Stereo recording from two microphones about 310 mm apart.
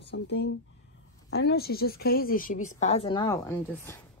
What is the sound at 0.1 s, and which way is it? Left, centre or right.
A woman's voice, left.